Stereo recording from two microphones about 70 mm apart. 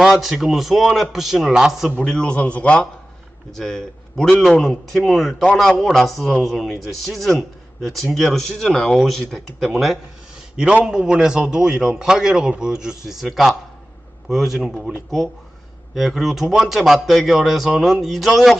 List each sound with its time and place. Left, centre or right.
0.0 s speech: centre
2.0 s a man's voice: centre
3.5 s a man's voice: centre
16.0 s speech: centre